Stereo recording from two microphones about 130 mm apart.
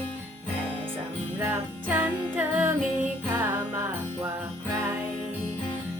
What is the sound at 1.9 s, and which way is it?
Music, 10° right (ahead or behind).